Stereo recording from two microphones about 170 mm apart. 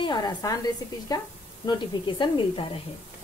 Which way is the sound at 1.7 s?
25° left (ahead or behind).